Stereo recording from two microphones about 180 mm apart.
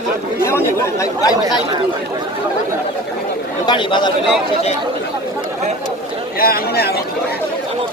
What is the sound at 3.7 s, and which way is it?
Speech, 25° left (ahead or behind).